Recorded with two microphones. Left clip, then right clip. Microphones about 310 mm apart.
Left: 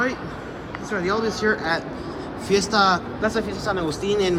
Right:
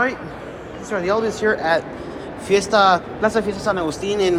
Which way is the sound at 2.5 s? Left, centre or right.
Centre.